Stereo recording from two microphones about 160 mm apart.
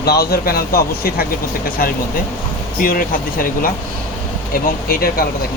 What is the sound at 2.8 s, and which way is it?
Speech, 60° left (ahead or behind).